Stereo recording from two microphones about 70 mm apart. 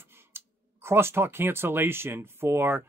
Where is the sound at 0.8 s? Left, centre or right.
Right.